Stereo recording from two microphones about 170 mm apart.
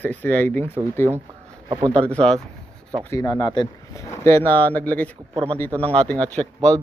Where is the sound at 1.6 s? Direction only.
30° right (ahead or behind).